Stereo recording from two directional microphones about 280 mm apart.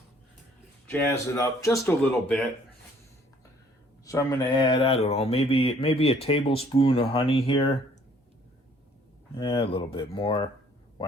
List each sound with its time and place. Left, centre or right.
0.9 s speech: centre
4.0 s speech: centre
9.3 s speech: centre